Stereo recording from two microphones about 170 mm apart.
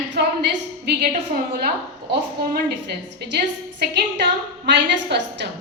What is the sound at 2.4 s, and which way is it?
Speech, 70° right (ahead or behind).